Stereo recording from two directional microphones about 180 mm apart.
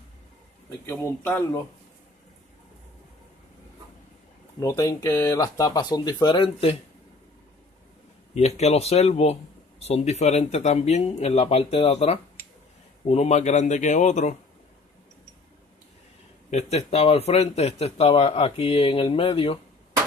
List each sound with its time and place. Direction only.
0.8 s speech: 10° left (ahead or behind)
4.6 s speech: 20° left (ahead or behind)
8.4 s speech: 35° left (ahead or behind)
16.4 s speech: 35° left (ahead or behind)